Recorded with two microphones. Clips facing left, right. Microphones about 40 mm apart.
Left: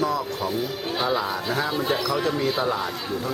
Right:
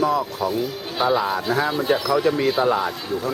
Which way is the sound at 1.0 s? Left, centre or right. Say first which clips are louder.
Right 6 dB; centre.